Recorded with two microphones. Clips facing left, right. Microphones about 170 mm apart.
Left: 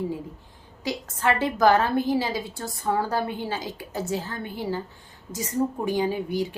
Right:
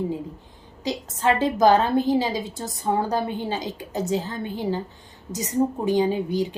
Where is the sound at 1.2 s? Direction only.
20° right (ahead or behind).